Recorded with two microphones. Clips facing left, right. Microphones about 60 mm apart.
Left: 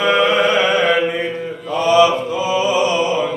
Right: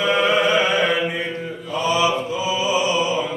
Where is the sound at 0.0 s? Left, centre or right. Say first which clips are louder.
Left 3 dB; left.